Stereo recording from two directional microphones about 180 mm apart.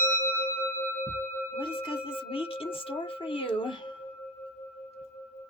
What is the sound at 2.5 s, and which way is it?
Speech, 30° left (ahead or behind).